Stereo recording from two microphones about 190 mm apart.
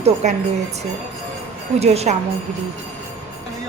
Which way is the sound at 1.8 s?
35° right (ahead or behind).